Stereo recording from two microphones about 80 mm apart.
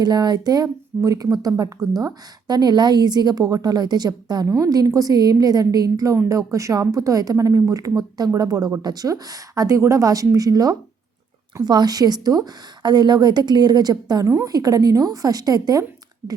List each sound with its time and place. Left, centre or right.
0.0 s a woman's voice: right
4.4 s a woman's voice: right